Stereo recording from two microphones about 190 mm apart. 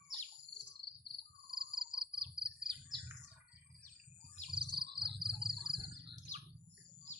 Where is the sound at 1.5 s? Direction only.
50° right (ahead or behind).